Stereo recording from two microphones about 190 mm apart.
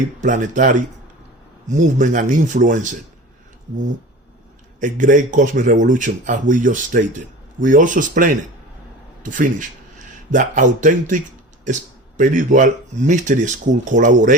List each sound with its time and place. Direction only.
0.2 s speech: 45° right (ahead or behind)
4.8 s speech: 45° right (ahead or behind)